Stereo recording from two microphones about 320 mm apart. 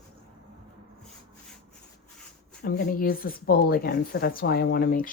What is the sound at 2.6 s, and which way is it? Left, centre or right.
Speech, left.